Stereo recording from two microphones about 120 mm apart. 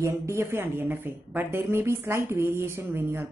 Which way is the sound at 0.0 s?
25° right (ahead or behind).